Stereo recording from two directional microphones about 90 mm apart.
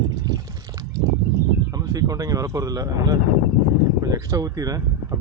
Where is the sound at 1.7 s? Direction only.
45° right (ahead or behind).